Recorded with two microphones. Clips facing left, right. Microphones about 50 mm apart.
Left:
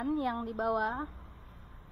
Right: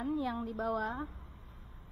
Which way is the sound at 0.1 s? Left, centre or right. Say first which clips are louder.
Left 3 dB; left.